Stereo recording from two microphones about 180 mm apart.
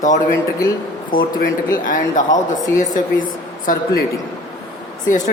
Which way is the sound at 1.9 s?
45° left (ahead or behind).